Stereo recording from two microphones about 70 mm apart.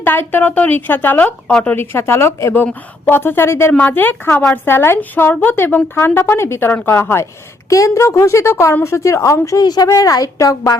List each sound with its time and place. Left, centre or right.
0.0 s a woman's voice: left
3.7 s a woman's voice: centre; by 7.3 s left
7.7 s speech: left
9.6 s speech: left
10.3 s speech: left